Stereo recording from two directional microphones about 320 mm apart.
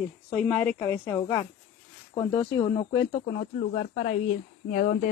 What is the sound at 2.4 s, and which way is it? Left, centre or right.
Speech, centre.